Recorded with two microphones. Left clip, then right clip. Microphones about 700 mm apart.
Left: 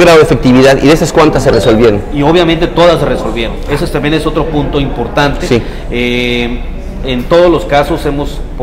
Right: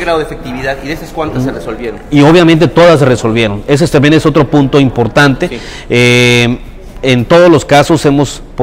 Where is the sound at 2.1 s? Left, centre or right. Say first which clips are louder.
Right 3 dB; right.